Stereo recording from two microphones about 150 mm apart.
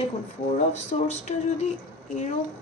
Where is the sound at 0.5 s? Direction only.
50° left (ahead or behind).